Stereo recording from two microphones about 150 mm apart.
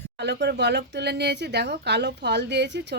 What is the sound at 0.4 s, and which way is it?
Speech, 90° right.